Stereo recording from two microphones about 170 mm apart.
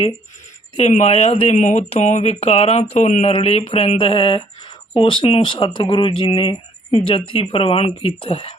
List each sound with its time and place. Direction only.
0.8 s speech: 35° left (ahead or behind)